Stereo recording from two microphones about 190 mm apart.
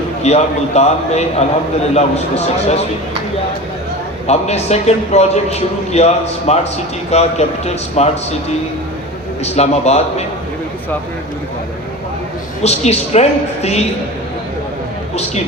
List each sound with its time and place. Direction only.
0.2 s a man's voice: 35° left (ahead or behind)
4.3 s a man's voice: 35° left (ahead or behind)
9.4 s a man's voice: 35° left (ahead or behind)
12.6 s a man's voice: 35° left (ahead or behind)